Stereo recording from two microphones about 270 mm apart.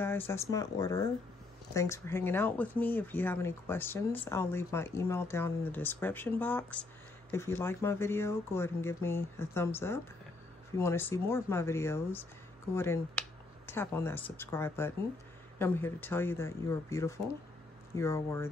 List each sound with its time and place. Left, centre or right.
0.0 s speech: centre